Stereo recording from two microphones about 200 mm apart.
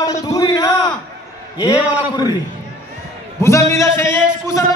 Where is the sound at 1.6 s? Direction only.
20° left (ahead or behind).